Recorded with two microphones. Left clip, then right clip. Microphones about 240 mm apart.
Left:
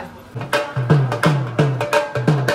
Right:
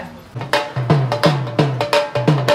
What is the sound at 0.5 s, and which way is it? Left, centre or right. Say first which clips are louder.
Music: right 1 dB; right.